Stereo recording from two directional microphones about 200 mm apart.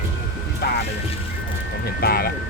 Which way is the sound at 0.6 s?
55° left (ahead or behind).